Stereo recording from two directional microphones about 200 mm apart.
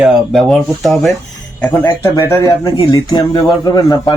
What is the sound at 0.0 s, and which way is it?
A man's voice, centre (ahead or behind).